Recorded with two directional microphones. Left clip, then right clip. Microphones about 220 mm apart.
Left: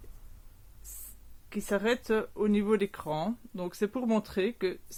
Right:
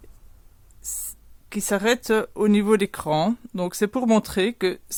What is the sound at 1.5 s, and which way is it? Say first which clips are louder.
Speech: right 7 dB; 40° right (ahead or behind).